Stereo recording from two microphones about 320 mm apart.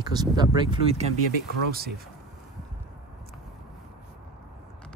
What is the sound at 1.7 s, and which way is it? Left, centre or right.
Speech, right.